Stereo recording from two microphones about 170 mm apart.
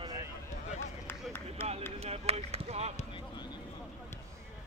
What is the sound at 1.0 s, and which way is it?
Run, 15° left (ahead or behind).